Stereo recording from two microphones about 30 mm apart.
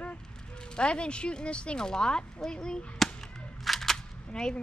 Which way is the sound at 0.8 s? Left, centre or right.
Left.